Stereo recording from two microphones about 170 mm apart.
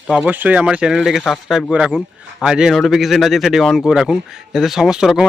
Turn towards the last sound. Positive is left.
turn(degrees=-5)  # may be behind; listen again after turning